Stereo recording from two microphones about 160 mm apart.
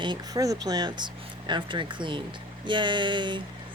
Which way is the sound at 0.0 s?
25° right (ahead or behind).